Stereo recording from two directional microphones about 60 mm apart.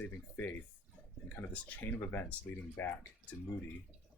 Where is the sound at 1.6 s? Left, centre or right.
Left.